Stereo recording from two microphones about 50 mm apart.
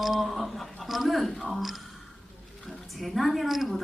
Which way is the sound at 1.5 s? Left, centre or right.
Centre.